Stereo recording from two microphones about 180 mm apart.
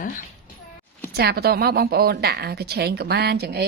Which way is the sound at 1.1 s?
60° right (ahead or behind).